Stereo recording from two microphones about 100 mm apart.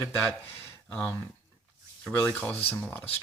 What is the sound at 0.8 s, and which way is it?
Speech, 10° left (ahead or behind).